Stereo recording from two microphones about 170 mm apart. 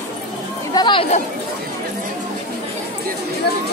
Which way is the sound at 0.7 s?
25° left (ahead or behind).